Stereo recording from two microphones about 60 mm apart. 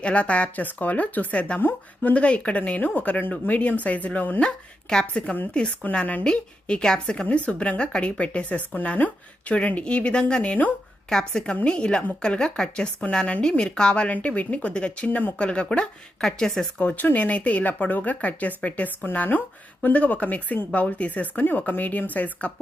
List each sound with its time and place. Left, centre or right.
0.0 s speech: left
2.1 s speech: left
4.4 s a woman's voice: centre
16.8 s speech: left